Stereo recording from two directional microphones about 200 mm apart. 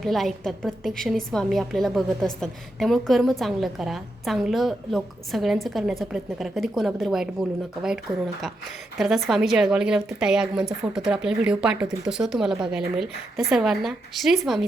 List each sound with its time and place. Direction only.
0.0 s a woman's voice: centre (ahead or behind)
9.0 s a woman's voice: centre (ahead or behind)